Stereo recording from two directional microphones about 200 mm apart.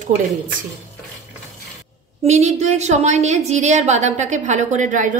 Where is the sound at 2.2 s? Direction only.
35° right (ahead or behind).